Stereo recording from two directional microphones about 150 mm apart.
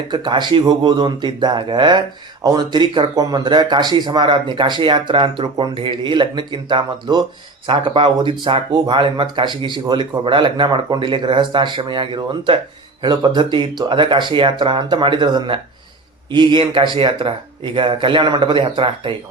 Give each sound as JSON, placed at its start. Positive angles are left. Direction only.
{"t": 0.1, "sound": "speech", "side_deg": -30}